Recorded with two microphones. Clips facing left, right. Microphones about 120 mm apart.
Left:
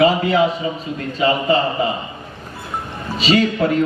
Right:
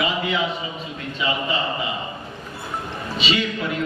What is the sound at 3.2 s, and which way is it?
Speech, 40° left (ahead or behind).